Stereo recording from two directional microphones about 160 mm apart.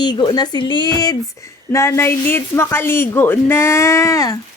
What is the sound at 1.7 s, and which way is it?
Speech, 20° left (ahead or behind).